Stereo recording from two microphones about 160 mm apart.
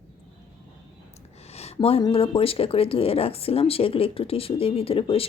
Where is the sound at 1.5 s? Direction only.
40° left (ahead or behind).